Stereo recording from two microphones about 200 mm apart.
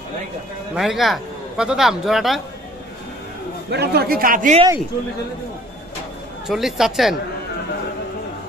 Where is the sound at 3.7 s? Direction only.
55° right (ahead or behind).